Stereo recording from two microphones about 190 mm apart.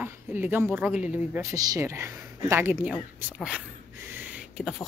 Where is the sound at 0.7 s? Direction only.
10° right (ahead or behind).